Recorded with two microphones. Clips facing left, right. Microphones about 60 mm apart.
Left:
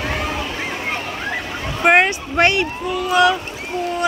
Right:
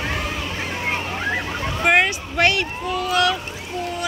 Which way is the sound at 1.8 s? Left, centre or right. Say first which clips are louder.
Left 4 dB; left.